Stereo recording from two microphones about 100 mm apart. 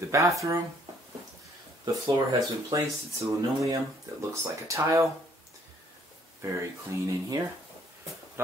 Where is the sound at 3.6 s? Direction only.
30° right (ahead or behind).